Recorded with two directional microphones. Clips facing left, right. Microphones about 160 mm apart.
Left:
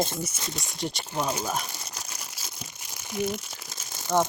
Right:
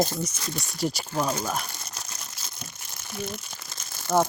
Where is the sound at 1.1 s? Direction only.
15° left (ahead or behind).